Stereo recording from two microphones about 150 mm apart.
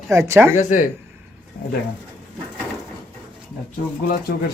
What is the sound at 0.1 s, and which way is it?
Speech, 20° right (ahead or behind).